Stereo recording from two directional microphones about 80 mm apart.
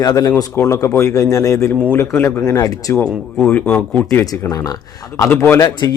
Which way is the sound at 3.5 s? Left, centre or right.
Left.